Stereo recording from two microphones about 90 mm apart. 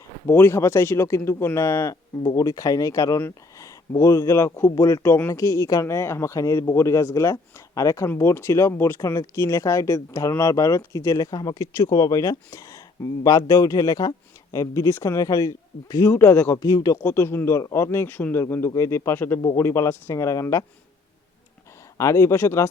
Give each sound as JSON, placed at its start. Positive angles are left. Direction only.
{"t": 0.3, "sound": "speech", "side_deg": 25}
{"t": 4.7, "sound": "speech", "side_deg": 40}
{"t": 16.0, "sound": "speech", "side_deg": 25}
{"t": 16.6, "sound": "speech", "side_deg": 45}
{"t": 17.0, "sound": "speech", "side_deg": 25}
{"t": 21.9, "sound": "speech", "side_deg": 35}